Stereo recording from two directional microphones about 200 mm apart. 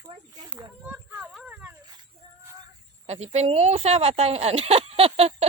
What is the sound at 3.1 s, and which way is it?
Speech, 30° right (ahead or behind).